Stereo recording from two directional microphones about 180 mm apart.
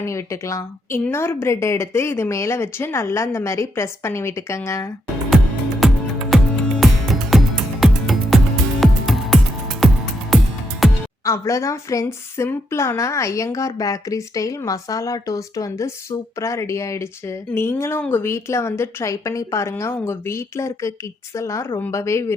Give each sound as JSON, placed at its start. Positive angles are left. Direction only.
{"t": 0.0, "sound": "a woman's voice", "side_deg": 15}
{"t": 5.8, "sound": "music", "side_deg": 0}
{"t": 11.3, "sound": "a woman's voice", "side_deg": 15}